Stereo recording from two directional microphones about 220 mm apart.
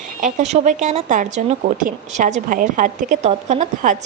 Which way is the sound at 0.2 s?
30° right (ahead or behind).